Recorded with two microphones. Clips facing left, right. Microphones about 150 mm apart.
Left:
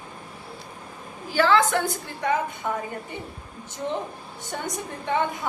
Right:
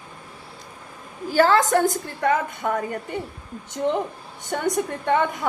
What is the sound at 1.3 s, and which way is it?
A woman's voice, 40° right (ahead or behind).